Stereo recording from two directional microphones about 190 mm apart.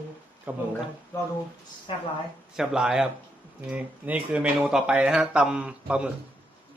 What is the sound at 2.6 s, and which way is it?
A man's voice, 5° right (ahead or behind).